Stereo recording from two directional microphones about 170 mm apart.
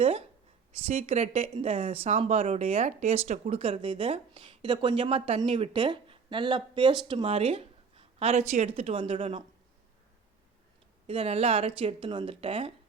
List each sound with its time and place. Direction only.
0.0 s speech: 35° right (ahead or behind)
11.0 s speech: 35° right (ahead or behind)